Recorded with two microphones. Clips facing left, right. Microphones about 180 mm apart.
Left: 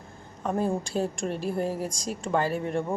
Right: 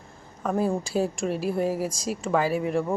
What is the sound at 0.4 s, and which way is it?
A woman's voice, 5° right (ahead or behind).